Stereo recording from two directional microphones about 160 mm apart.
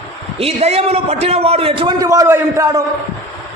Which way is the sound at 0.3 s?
40° right (ahead or behind).